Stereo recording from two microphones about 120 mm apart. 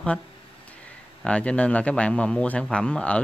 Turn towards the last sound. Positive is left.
turn(degrees=10)  # may be behind; listen again after turning